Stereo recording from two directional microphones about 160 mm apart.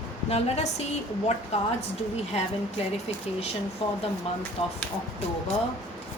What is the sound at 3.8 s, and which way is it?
Speech, 35° left (ahead or behind).